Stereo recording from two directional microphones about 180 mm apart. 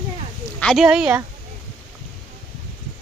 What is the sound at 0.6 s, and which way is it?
Speech, centre (ahead or behind).